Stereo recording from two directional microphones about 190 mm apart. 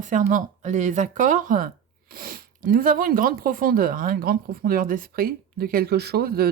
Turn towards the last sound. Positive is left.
turn(degrees=-55)  # may be behind; listen again after turning